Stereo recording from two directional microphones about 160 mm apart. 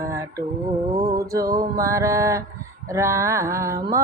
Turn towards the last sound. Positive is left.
turn(degrees=-20)  # may be behind; listen again after turning